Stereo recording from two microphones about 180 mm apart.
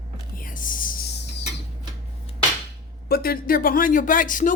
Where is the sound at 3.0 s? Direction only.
60° left (ahead or behind).